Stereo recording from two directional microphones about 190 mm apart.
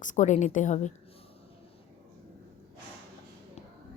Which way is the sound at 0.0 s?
40° left (ahead or behind).